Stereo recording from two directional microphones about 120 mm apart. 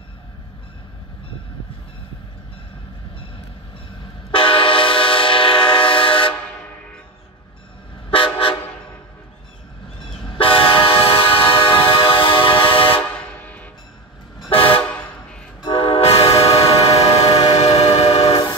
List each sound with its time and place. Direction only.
4.3 s train: 45° left (ahead or behind)
8.1 s toot: 50° left (ahead or behind)
10.0 s train: 45° left (ahead or behind)
13.3 s train: 15° left (ahead or behind)
14.5 s toot: 50° left (ahead or behind)
14.9 s vehicle: 10° left (ahead or behind)
15.6 s train: 50° left (ahead or behind)